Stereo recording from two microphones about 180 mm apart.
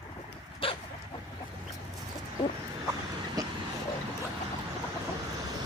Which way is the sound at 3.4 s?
20° right (ahead or behind).